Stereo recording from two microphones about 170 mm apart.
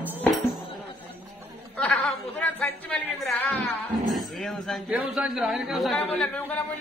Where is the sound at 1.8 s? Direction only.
10° left (ahead or behind).